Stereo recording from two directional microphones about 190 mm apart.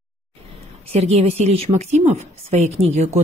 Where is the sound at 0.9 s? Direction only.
35° right (ahead or behind).